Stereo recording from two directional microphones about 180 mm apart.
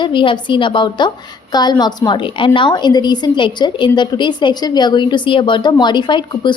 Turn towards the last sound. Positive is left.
turn(degrees=25)  # may be behind; listen again after turning